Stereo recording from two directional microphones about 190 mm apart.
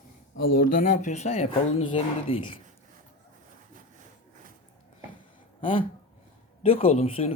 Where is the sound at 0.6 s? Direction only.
45° left (ahead or behind); by 2.6 s 25° left (ahead or behind).